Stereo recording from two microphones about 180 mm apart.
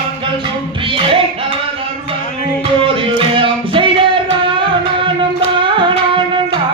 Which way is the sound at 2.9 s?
30° right (ahead or behind).